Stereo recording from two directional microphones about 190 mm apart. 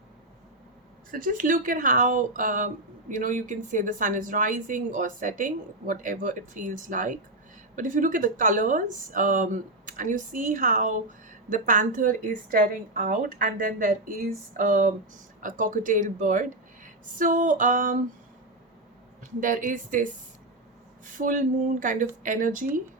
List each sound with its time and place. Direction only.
1.1 s a woman's voice: 45° right (ahead or behind)
19.4 s a woman's voice: 45° right (ahead or behind)
21.1 s a woman's voice: 45° right (ahead or behind)